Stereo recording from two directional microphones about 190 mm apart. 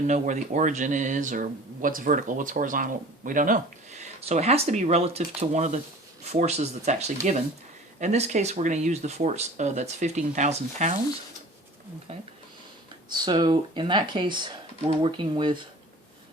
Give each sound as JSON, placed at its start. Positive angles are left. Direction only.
{"t": 0.1, "sound": "speech", "side_deg": -40}
{"t": 12.1, "sound": "speech", "side_deg": -30}